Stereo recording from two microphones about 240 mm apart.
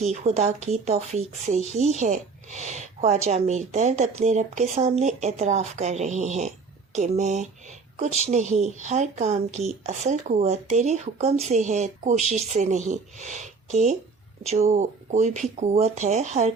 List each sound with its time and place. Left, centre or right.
0.1 s speech: right